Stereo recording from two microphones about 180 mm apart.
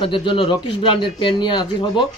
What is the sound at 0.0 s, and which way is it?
Speech, 30° left (ahead or behind).